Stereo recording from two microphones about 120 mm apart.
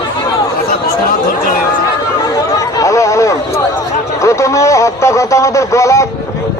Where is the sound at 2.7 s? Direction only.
25° left (ahead or behind).